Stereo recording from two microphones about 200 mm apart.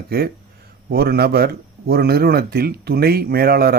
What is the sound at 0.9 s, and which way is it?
Speech, 50° right (ahead or behind).